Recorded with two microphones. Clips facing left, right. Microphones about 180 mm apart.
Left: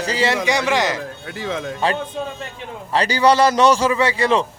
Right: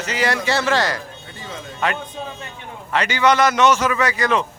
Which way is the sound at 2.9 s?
35° left (ahead or behind).